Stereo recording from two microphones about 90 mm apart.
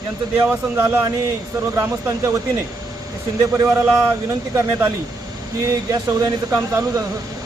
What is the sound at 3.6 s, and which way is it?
Speech, 25° right (ahead or behind).